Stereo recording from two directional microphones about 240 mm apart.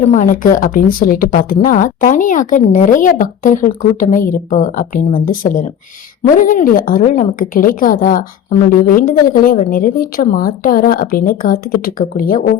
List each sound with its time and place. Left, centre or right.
0.1 s a woman's voice: left